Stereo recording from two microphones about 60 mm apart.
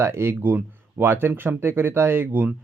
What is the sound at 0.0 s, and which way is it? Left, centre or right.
Speech, right.